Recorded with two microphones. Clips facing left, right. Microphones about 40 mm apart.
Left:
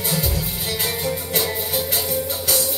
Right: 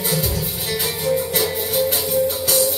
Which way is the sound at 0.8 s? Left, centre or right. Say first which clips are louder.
Right 6 dB; centre.